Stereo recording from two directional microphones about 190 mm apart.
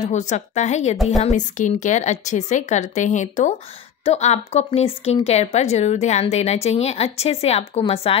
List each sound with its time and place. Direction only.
0.0 s a woman's voice: 40° left (ahead or behind)